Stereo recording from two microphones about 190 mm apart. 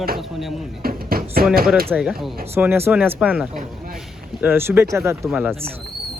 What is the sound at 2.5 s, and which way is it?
Speech, 10° right (ahead or behind).